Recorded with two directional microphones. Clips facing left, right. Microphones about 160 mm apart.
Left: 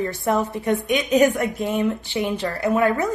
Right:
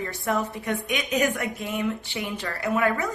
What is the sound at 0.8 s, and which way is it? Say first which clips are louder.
A woman's voice: left 8 dB; 25° left (ahead or behind).